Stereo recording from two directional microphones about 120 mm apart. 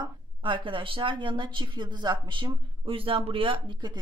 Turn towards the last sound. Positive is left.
turn(degrees=-40)  # may be behind; listen again after turning